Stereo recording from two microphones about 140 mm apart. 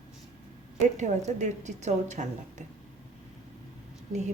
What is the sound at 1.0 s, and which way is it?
A woman's voice, 55° right (ahead or behind).